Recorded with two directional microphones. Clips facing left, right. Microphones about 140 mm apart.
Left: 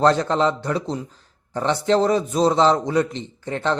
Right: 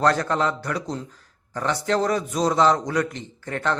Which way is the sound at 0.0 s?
25° left (ahead or behind).